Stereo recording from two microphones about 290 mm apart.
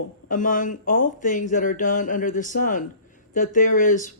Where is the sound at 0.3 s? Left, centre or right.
Left.